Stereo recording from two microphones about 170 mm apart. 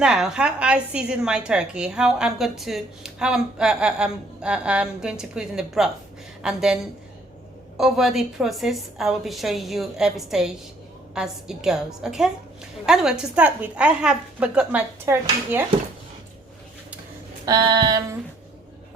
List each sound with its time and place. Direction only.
0.0 s a woman's voice: 5° right (ahead or behind)
7.8 s a woman's voice: centre (ahead or behind)
17.4 s a sound: 25° right (ahead or behind)